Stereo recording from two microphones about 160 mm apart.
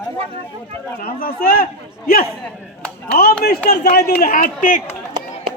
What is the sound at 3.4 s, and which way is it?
Speech, 80° left.